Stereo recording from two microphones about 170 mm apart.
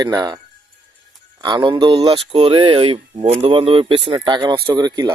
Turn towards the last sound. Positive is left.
turn(degrees=-25)  # may be behind; listen again after turning